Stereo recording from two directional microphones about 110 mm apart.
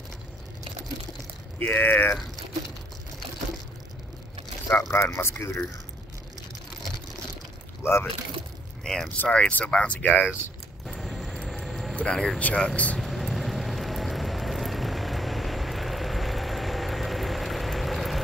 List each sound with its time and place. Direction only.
1.6 s speech: 15° left (ahead or behind)
4.9 s speech: 25° left (ahead or behind)
7.8 s speech: 20° left (ahead or behind)
8.8 s speech: 5° left (ahead or behind)
10.9 s a sound: centre (ahead or behind)
12.0 s speech: 5° left (ahead or behind)
13.0 s vehicle: centre (ahead or behind)